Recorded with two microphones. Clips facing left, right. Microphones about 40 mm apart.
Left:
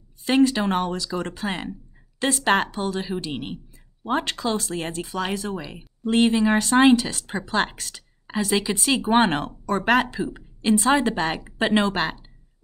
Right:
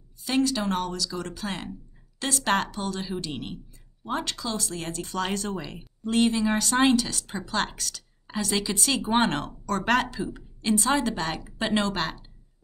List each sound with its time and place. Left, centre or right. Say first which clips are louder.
0.2 s a woman's voice: left 6 dB; left
4.0 s a woman's voice: left 6 dB; left
5.0 s speech: left 2 dB; centre
6.0 s a woman's voice: left 4 dB; left